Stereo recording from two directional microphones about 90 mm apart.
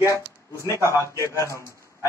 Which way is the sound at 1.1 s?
35° left (ahead or behind).